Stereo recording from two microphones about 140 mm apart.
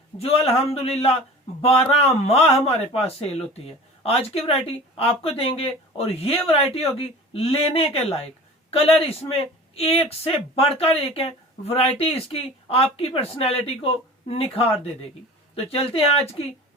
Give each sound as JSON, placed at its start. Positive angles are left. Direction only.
{"t": 0.2, "sound": "speech", "side_deg": 45}
{"t": 4.0, "sound": "speech", "side_deg": 45}